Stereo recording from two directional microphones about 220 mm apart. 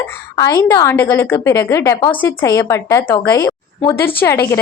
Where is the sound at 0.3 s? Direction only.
15° left (ahead or behind).